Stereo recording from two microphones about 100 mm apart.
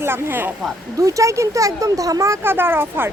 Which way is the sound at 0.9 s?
35° right (ahead or behind).